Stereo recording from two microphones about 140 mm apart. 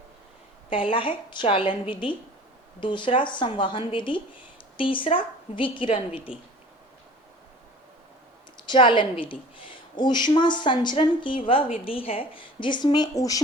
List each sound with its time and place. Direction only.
0.7 s a woman's voice: 40° left (ahead or behind)
6.3 s speech: 5° right (ahead or behind)
8.6 s a woman's voice: 35° left (ahead or behind)